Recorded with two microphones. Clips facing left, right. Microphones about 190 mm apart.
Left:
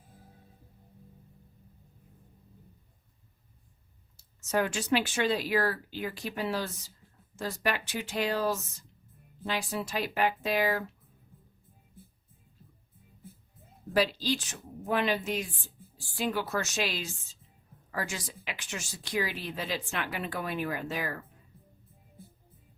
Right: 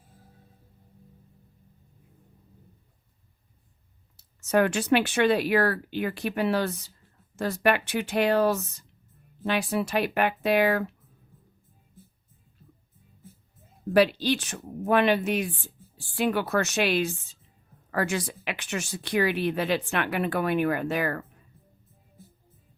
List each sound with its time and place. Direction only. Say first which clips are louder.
4.2 s speech: right 6 dB; 65° right (ahead or behind)
13.9 s speech: right 6 dB; 65° right (ahead or behind)